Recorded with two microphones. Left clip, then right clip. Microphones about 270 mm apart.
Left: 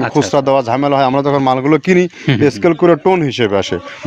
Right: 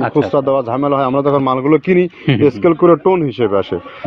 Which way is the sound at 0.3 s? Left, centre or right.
Left.